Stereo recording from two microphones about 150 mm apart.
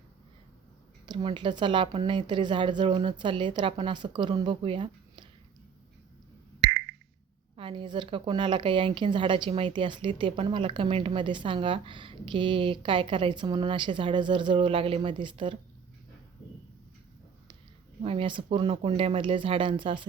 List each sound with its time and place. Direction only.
1.0 s a woman's voice: 35° right (ahead or behind)
7.5 s a woman's voice: 35° right (ahead or behind)
18.0 s a woman's voice: 35° right (ahead or behind)